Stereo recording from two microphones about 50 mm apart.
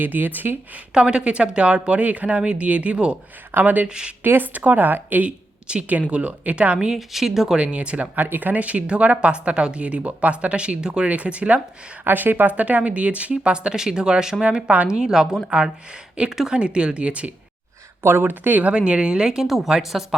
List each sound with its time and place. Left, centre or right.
0.0 s a woman's voice: right
0.9 s a woman's voice: centre
3.5 s a woman's voice: right
3.8 s a woman's voice: centre
4.2 s a woman's voice: right
5.6 s a woman's voice: right
6.7 s a woman's voice: centre
8.1 s a woman's voice: right
12.0 s a woman's voice: right; by 14.4 s centre
14.4 s a woman's voice: right
18.0 s speech: right
18.3 s a woman's voice: right
18.7 s a woman's voice: right
19.5 s a woman's voice: centre